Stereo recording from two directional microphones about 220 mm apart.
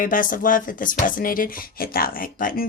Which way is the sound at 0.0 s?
40° left (ahead or behind).